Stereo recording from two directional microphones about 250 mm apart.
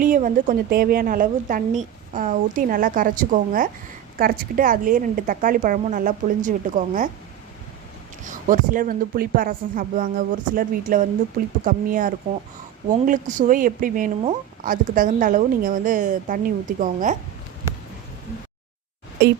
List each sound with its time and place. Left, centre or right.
0.0 s speech: right
8.2 s speech: right